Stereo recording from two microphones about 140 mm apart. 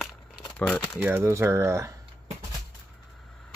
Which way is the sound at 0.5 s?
10° left (ahead or behind).